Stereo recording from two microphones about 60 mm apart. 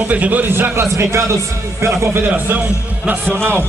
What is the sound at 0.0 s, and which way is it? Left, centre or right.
Speech, right.